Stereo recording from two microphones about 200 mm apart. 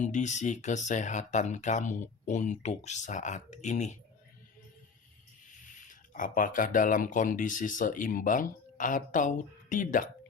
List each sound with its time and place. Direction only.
0.0 s speech: 35° left (ahead or behind)
5.6 s speech: 40° left (ahead or behind)